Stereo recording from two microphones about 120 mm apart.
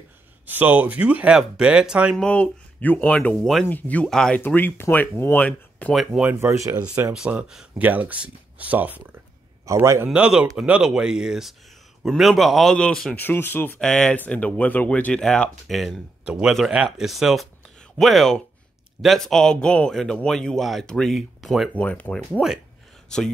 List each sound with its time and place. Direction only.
0.5 s speech: 15° right (ahead or behind)
2.1 s speech: 10° left (ahead or behind)
6.2 s speech: 20° right (ahead or behind)
7.2 s speech: 10° right (ahead or behind); by 10.0 s 25° right (ahead or behind)
10.0 s speech: 5° right (ahead or behind)
13.2 s speech: 15° left (ahead or behind)
13.7 s speech: 5° left (ahead or behind)
21.7 s speech: 10° left (ahead or behind)